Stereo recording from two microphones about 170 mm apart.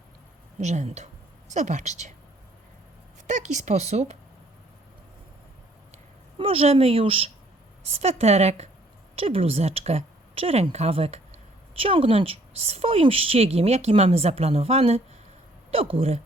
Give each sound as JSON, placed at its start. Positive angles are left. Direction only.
{"t": 0.6, "sound": "a woman's voice", "side_deg": -45}
{"t": 3.2, "sound": "a woman's voice", "side_deg": -45}
{"t": 5.9, "sound": "a woman's voice", "side_deg": -35}